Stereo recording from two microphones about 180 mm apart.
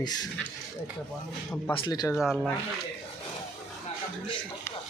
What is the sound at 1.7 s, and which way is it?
Speech, 25° left (ahead or behind).